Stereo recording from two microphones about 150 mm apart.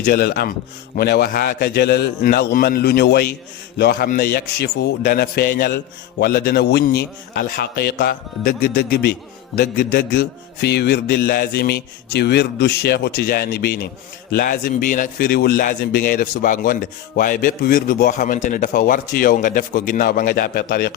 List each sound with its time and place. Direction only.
0.0 s a man's voice: 90° left
14.3 s a man's voice: 75° left (ahead or behind)